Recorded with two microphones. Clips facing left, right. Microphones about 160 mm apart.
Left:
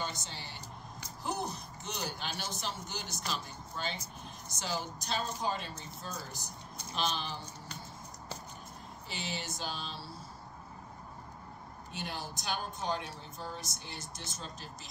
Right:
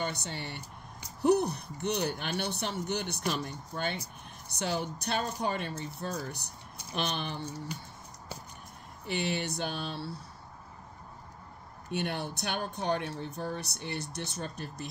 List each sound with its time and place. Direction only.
0.0 s speech: 60° right (ahead or behind)
9.0 s speech: 60° right (ahead or behind)
11.9 s speech: 65° right (ahead or behind)